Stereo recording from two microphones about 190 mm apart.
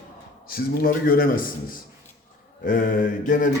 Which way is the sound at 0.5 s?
50° left (ahead or behind).